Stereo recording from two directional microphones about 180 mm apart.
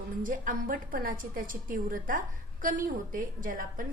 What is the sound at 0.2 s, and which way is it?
A woman's voice, 50° right (ahead or behind).